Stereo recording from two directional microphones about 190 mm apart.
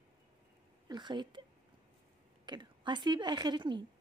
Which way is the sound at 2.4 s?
25° right (ahead or behind).